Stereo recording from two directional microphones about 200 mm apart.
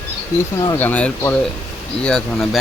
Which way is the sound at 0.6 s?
15° left (ahead or behind).